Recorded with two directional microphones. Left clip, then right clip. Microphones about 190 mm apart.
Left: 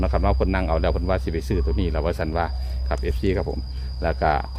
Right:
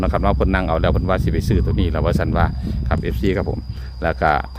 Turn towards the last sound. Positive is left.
turn(degrees=-30)  # may be behind; listen again after turning